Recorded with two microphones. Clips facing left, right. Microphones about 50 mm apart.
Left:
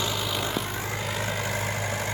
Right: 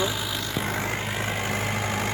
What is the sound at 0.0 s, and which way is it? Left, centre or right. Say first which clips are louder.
Vehicle: right 1 dB; centre.